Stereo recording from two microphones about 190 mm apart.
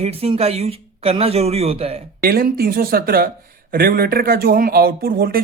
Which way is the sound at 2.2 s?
55° right (ahead or behind).